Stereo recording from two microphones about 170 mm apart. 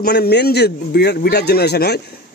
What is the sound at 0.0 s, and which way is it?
A man's voice, 70° left (ahead or behind).